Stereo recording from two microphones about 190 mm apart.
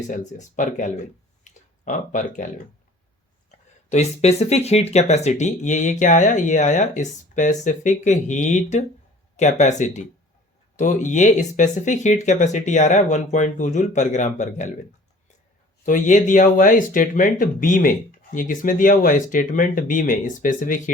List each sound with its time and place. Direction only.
0.1 s speech: 40° left (ahead or behind)
3.8 s speech: 35° left (ahead or behind)
15.9 s speech: 40° left (ahead or behind)